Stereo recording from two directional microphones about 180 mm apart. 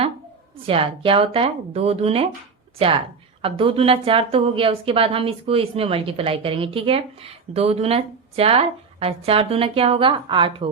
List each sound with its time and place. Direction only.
0.6 s a woman's voice: 30° right (ahead or behind)